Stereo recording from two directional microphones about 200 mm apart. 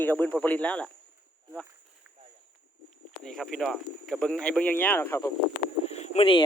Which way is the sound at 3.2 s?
Centre (ahead or behind).